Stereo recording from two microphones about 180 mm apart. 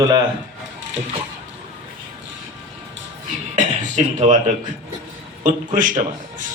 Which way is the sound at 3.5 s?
45° right (ahead or behind).